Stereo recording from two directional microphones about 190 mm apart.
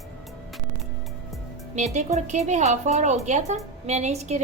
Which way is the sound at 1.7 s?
35° right (ahead or behind).